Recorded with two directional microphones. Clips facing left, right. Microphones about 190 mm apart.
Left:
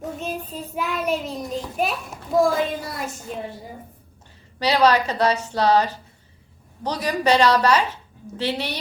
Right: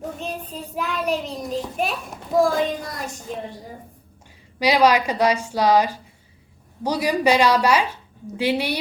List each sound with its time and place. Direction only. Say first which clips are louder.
0.2 s a child's voice: left 1 dB; centre (ahead or behind)
4.6 s a woman's voice: right 1 dB; 10° right (ahead or behind)